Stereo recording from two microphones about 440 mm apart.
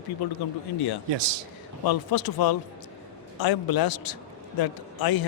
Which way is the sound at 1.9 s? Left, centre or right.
Left.